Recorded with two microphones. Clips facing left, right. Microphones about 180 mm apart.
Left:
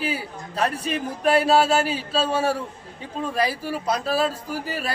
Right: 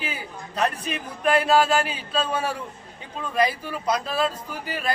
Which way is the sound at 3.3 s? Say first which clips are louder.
Right 2 dB; 35° left (ahead or behind).